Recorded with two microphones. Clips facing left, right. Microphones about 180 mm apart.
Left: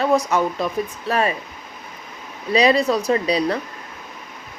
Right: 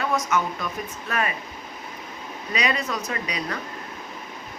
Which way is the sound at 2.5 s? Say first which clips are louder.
Left 10 dB; 30° left (ahead or behind).